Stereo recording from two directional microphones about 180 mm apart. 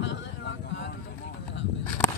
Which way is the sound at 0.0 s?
80° left.